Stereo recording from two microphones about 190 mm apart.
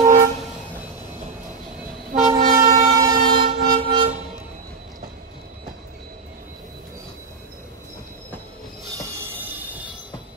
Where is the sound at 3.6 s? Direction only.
50° right (ahead or behind).